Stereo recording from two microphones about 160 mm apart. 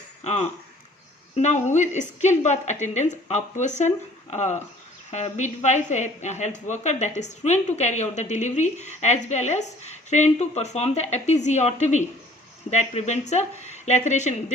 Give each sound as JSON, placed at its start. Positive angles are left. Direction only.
{"t": 1.4, "sound": "speech", "side_deg": 45}